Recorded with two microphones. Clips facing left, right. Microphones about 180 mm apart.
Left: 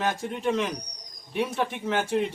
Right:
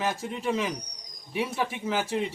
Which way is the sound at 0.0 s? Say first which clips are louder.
Left 2 dB; centre (ahead or behind).